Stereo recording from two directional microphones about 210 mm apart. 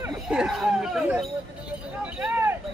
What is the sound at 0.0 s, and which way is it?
Speech, 5° right (ahead or behind).